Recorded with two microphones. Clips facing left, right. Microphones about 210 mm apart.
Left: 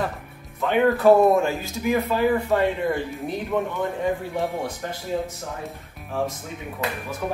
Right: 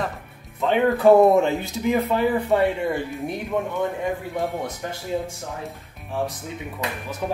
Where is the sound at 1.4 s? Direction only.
20° right (ahead or behind).